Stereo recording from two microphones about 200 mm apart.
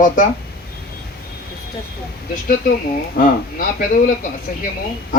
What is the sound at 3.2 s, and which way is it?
Speech, 45° left (ahead or behind).